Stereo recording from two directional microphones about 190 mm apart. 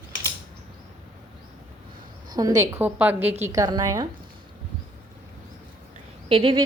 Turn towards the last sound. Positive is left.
turn(degrees=-30)  # may be behind; listen again after turning